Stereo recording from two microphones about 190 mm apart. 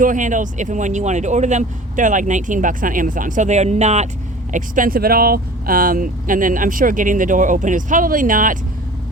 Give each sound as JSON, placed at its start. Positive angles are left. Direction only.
{"t": 0.0, "sound": "speech", "side_deg": -45}